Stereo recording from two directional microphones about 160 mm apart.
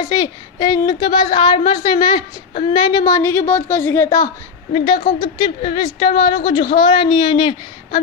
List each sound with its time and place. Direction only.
0.0 s a woman's voice: 25° left (ahead or behind)
4.7 s a woman's voice: 30° left (ahead or behind)